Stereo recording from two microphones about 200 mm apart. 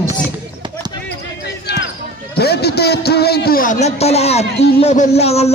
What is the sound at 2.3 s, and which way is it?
A man's voice, 55° left (ahead or behind).